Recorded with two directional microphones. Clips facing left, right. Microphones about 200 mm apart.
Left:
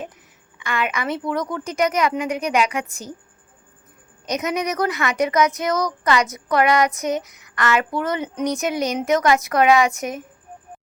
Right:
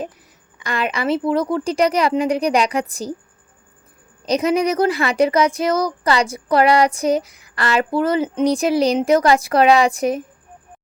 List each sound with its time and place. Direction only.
0.6 s speech: 35° right (ahead or behind)
4.3 s speech: 30° right (ahead or behind)